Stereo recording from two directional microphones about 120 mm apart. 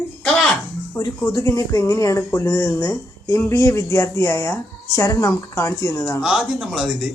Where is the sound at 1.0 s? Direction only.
20° left (ahead or behind).